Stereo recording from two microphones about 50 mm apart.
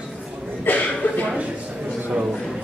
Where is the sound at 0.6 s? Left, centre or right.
Left.